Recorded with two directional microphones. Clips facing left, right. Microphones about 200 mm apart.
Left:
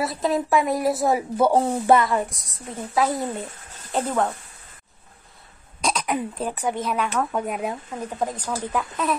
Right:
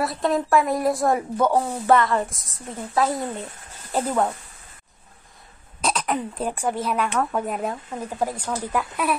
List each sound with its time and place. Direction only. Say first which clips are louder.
0.0 s a woman's voice: even; centre (ahead or behind)
1.5 s speech: left 2 dB; 30° left (ahead or behind)
1.9 s speech: right 1 dB; 15° left (ahead or behind)
2.2 s a woman's voice: even; centre (ahead or behind)
5.8 s throat clearing: even; 5° right (ahead or behind)
6.0 s speech: even; 10° left (ahead or behind)
6.7 s speech: right 1 dB; 5° right (ahead or behind)
7.1 s a woman's voice: right 1 dB; 5° left (ahead or behind)